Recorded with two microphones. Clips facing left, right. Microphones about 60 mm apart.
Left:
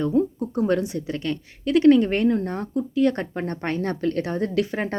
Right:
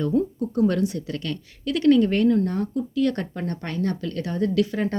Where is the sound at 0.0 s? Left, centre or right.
Centre.